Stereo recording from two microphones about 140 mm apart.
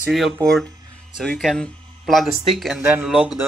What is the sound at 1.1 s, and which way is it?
Speech, centre (ahead or behind).